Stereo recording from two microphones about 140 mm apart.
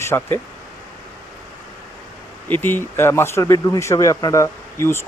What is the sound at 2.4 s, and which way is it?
Speech, 15° left (ahead or behind).